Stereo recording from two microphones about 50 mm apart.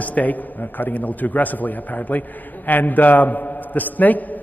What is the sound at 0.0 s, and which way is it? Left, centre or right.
A man's voice, left.